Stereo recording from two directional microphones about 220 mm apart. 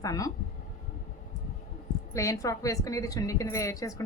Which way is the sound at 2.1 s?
15° left (ahead or behind).